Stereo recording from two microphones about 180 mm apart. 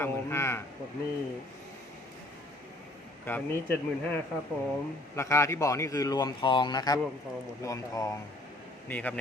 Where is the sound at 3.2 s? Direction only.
10° left (ahead or behind).